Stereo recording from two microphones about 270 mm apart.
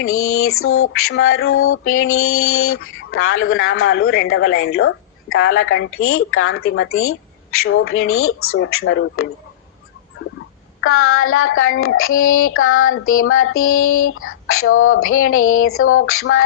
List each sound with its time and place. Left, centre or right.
0.0 s child singing: left
10.8 s child singing: left